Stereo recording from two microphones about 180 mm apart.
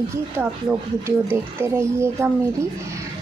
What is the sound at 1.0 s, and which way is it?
Speech, 15° right (ahead or behind).